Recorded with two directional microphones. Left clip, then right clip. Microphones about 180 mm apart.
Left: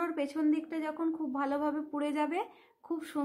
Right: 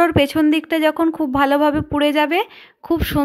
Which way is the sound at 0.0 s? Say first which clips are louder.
Right 17 dB; 40° right (ahead or behind).